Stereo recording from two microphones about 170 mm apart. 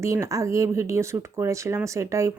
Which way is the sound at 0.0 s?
15° right (ahead or behind).